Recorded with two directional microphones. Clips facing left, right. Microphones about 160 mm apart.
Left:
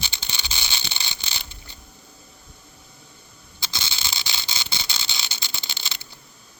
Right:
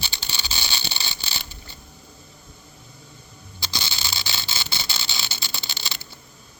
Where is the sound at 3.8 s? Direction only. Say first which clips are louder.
Right 1 dB; 20° left (ahead or behind).